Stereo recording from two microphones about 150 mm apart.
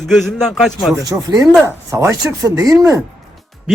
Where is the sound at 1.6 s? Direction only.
20° right (ahead or behind).